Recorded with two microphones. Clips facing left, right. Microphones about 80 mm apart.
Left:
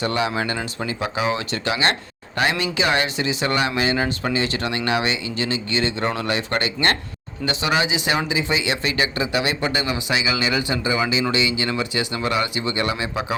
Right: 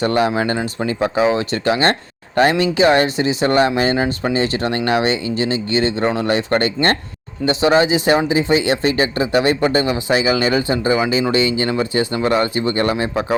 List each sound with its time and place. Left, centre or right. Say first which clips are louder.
0.0 s speech: right 6 dB; right